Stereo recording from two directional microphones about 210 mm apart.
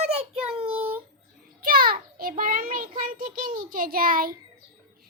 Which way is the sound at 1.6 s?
45° right (ahead or behind).